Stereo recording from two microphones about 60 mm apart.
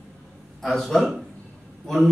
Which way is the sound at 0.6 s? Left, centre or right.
Centre.